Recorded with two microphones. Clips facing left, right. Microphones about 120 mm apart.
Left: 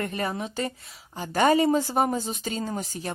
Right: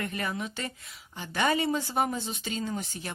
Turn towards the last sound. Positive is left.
turn(degrees=35)  # may be behind; listen again after turning